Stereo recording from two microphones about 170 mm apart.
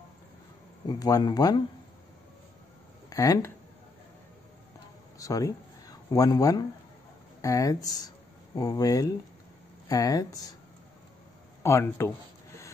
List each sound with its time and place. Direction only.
0.8 s speech: 20° left (ahead or behind)
3.1 s speech: 20° left (ahead or behind)
5.2 s speech: 20° left (ahead or behind)
11.6 s speech: 15° left (ahead or behind)